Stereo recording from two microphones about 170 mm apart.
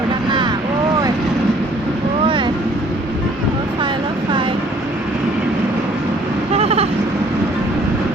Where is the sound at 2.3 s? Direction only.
30° right (ahead or behind).